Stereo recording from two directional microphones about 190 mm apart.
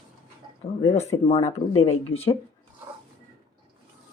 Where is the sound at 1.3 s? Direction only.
30° left (ahead or behind).